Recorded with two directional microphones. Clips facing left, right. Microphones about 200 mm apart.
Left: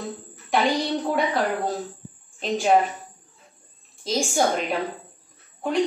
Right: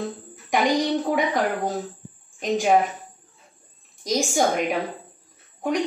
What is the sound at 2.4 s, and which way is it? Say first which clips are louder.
Speech: right 2 dB; 15° right (ahead or behind).